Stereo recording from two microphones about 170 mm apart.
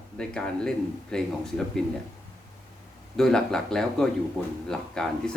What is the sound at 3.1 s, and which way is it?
Speech, centre (ahead or behind).